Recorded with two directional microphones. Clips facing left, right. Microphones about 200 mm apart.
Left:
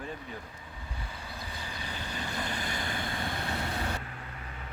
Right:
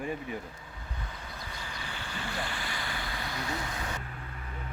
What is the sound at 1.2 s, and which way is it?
Vehicle, 30° left (ahead or behind).